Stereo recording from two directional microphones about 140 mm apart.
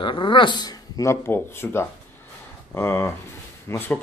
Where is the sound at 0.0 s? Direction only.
35° left (ahead or behind).